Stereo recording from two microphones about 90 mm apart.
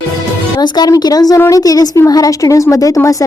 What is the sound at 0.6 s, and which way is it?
A woman's voice, 50° left (ahead or behind).